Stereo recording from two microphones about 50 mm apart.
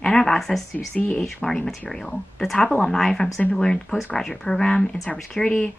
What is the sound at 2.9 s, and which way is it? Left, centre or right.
Speech, centre.